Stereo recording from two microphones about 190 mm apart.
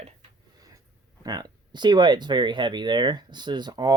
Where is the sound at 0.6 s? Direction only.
20° right (ahead or behind).